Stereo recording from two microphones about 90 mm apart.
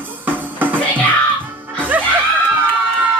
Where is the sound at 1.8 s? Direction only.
20° right (ahead or behind).